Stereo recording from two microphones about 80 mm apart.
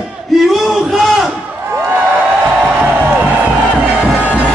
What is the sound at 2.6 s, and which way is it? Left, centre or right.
Music, centre.